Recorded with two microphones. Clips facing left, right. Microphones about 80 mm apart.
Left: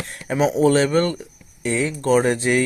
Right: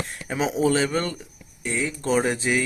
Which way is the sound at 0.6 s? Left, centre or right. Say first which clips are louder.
Left 5 dB; left.